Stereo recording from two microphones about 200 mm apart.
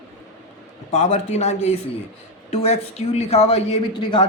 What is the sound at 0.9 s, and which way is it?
A man's voice, 35° left (ahead or behind).